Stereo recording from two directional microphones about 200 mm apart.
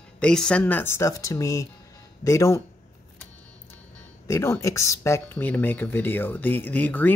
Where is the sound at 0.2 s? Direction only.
5° left (ahead or behind).